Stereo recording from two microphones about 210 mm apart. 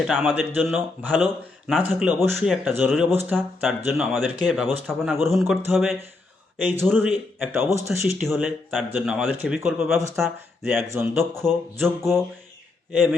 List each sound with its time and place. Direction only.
0.0 s speech: centre (ahead or behind)
3.1 s a man's voice: 10° right (ahead or behind)
3.3 s a man's voice: centre (ahead or behind)
7.9 s speech: centre (ahead or behind)
10.8 s a man's voice: 10° right (ahead or behind)
11.2 s speech: centre (ahead or behind)